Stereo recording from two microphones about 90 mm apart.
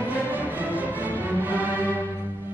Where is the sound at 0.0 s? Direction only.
20° right (ahead or behind).